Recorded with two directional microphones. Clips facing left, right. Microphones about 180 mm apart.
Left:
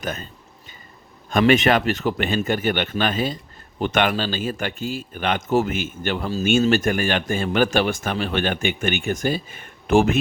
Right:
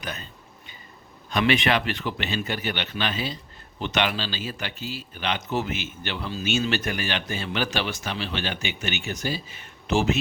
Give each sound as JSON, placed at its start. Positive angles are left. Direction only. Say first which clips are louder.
{"t": 0.0, "sound": "a man's voice", "louder": "left 6 dB", "side_deg": 45}
{"t": 1.3, "sound": "a man's voice", "louder": "left 6 dB", "side_deg": 45}